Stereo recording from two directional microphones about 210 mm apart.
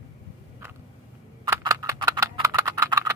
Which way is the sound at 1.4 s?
15° right (ahead or behind).